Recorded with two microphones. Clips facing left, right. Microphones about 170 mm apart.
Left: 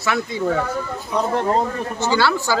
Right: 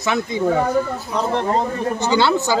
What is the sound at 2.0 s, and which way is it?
Speech, 20° right (ahead or behind).